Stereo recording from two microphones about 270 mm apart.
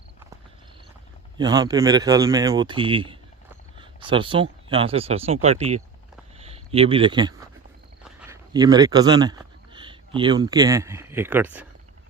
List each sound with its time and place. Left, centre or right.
1.4 s speech: centre